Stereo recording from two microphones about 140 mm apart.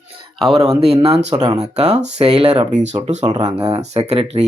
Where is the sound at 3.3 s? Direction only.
30° right (ahead or behind).